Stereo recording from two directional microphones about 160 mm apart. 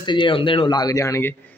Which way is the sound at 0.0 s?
30° left (ahead or behind).